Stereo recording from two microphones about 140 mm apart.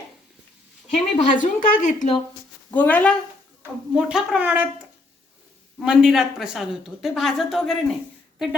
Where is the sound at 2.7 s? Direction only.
10° left (ahead or behind).